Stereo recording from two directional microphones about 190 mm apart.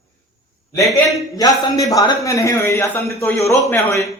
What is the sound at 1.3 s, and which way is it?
A man's voice, 20° left (ahead or behind).